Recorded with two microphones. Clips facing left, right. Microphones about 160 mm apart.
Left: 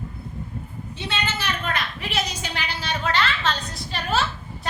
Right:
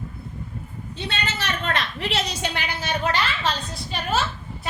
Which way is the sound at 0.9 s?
75° right (ahead or behind).